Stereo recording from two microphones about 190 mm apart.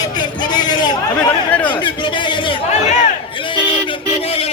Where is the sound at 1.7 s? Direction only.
25° left (ahead or behind).